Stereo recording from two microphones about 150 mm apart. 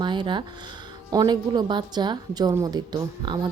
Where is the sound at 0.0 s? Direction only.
30° right (ahead or behind).